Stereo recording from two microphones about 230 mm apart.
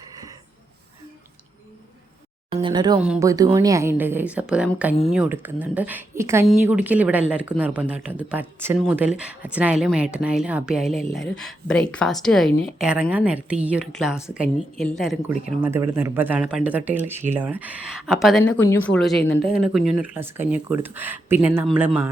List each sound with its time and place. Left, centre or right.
0.1 s a sound: centre
2.5 s speech: right; by 15.4 s centre
15.6 s speech: centre